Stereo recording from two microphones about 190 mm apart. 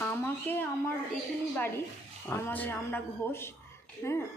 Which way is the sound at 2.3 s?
10° left (ahead or behind).